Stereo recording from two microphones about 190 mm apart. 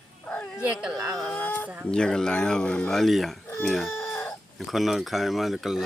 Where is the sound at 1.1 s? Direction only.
5° left (ahead or behind).